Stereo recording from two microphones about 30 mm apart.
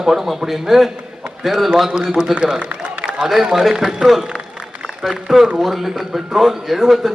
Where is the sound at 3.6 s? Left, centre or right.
Centre.